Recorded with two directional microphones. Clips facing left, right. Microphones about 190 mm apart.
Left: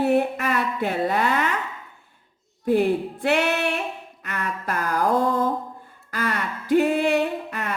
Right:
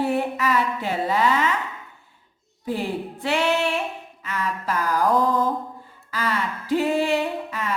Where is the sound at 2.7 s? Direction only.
55° left (ahead or behind).